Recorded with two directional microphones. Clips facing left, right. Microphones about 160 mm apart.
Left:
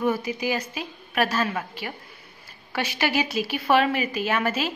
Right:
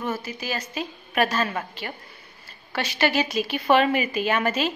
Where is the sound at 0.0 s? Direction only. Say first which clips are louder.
Left 5 dB; 15° left (ahead or behind).